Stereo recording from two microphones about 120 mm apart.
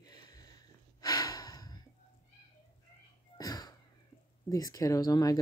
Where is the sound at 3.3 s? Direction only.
35° left (ahead or behind).